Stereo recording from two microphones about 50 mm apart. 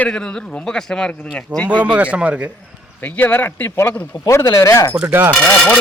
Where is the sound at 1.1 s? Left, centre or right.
Left.